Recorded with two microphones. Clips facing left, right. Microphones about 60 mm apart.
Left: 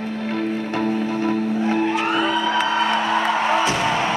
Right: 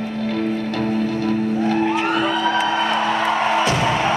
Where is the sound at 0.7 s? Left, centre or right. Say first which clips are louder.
Right 1 dB; left.